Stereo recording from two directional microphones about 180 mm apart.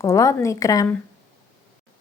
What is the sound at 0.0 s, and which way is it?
Speech, 15° left (ahead or behind).